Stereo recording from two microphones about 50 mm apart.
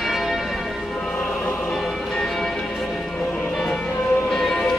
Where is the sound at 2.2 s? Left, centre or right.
Centre.